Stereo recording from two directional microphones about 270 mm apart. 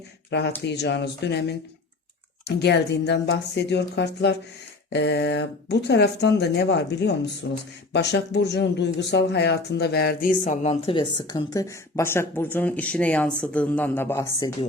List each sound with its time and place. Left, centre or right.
0.3 s speech: left; by 14.5 s centre